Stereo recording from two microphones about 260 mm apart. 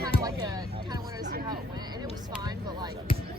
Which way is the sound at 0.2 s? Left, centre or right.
Centre.